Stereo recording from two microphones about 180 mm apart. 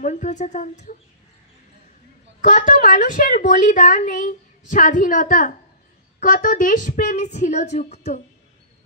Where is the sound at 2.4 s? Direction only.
45° left (ahead or behind).